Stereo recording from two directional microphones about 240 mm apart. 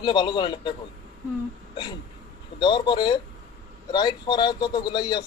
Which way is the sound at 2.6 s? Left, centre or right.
Centre.